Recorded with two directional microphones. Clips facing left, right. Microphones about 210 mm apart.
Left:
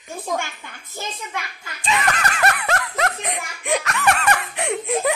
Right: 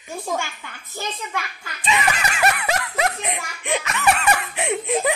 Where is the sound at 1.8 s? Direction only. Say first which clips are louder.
Even; 5° right (ahead or behind).